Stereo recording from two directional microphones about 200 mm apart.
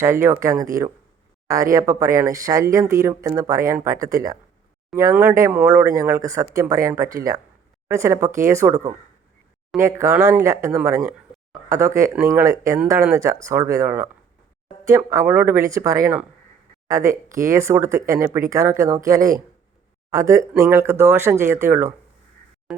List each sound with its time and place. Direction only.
0.0 s speech: 15° right (ahead or behind)